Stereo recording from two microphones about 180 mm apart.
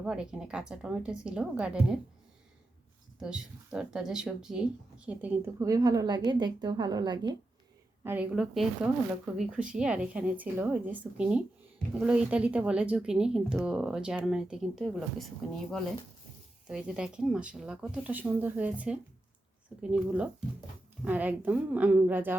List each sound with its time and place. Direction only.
0.0 s speech: 5° right (ahead or behind)
3.2 s speech: 5° right (ahead or behind); by 7.3 s 25° right (ahead or behind)
8.0 s speech: 10° right (ahead or behind)
16.6 s speech: 5° right (ahead or behind)